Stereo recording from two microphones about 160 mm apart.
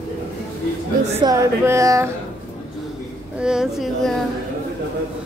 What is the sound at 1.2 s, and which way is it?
Speech, 20° right (ahead or behind).